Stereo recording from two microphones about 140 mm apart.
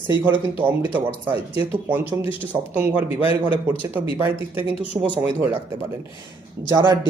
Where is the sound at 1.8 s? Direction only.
15° right (ahead or behind).